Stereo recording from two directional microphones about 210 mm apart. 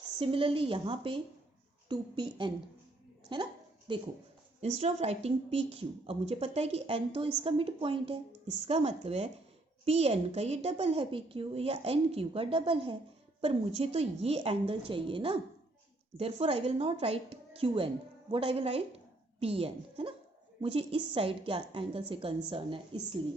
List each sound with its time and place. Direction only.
0.2 s a woman's voice: 25° right (ahead or behind)
3.3 s a woman's voice: 25° right (ahead or behind)